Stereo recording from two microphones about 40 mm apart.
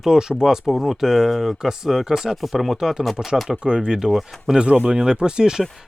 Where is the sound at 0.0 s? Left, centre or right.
Centre.